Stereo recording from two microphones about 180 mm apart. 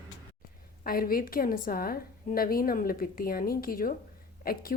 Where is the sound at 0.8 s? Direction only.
55° left (ahead or behind).